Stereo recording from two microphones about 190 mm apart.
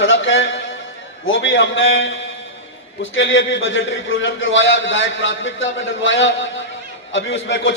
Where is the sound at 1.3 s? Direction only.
85° left.